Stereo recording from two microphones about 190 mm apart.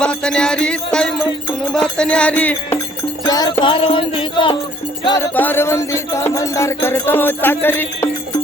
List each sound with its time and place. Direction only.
0.0 s music: 5° left (ahead or behind)
3.2 s music: 20° left (ahead or behind)
5.3 s music: 10° left (ahead or behind)